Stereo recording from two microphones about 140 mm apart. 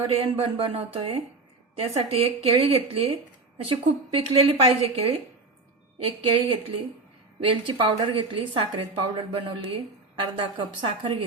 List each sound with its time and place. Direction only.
0.1 s a woman's voice: 45° right (ahead or behind)